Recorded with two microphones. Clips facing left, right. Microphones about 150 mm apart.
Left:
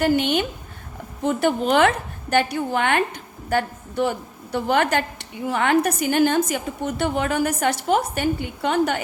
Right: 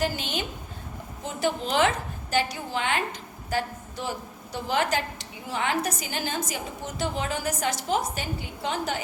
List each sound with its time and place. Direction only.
0.0 s a woman's voice: 60° left (ahead or behind)